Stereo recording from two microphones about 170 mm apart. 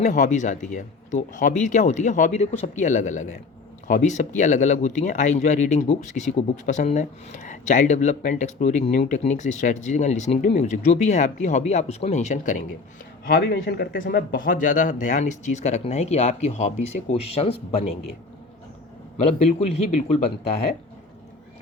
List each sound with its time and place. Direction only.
0.0 s speech: 45° left (ahead or behind)
13.2 s speech: 65° left (ahead or behind); by 17.8 s 35° left (ahead or behind)
19.1 s a man's voice: 40° left (ahead or behind)